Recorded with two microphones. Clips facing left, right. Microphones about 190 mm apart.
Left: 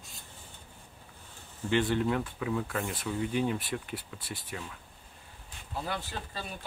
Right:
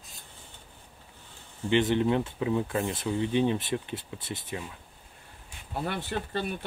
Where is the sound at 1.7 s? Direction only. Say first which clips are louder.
Right 4 dB; 20° right (ahead or behind).